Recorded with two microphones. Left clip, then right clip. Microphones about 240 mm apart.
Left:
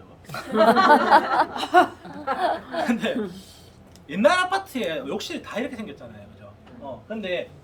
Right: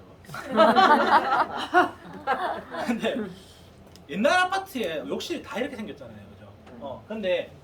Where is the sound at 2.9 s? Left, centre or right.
Centre.